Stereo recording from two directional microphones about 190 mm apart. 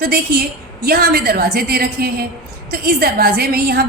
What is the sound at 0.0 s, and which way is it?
A woman's voice, 55° right (ahead or behind).